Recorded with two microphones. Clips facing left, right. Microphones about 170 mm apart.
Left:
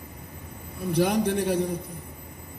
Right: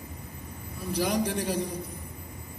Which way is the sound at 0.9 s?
60° left (ahead or behind).